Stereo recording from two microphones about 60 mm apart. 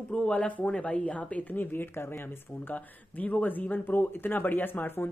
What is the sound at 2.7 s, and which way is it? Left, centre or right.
Speech, left.